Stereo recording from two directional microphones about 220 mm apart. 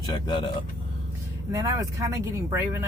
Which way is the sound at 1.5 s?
15° right (ahead or behind).